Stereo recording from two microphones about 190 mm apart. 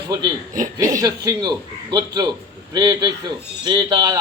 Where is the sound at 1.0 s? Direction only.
20° right (ahead or behind).